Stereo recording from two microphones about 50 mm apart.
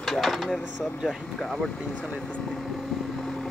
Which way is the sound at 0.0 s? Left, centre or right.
Centre.